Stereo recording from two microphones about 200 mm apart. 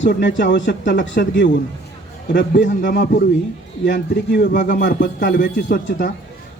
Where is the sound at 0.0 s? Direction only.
65° left (ahead or behind).